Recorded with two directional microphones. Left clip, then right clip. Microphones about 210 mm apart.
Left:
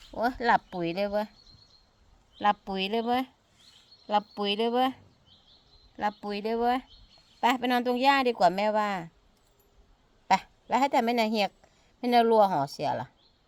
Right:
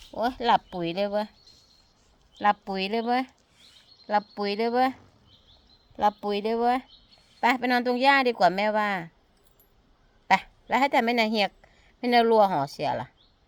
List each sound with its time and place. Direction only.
0.1 s speech: centre (ahead or behind)
2.4 s speech: centre (ahead or behind)
6.0 s speech: 20° right (ahead or behind); by 9.0 s 5° right (ahead or behind)
10.2 s speech: centre (ahead or behind)